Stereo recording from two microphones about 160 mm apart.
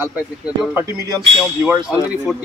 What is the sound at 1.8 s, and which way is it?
Speech, 10° right (ahead or behind).